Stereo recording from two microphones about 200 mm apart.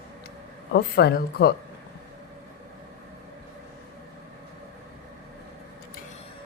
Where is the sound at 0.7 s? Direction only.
55° left (ahead or behind).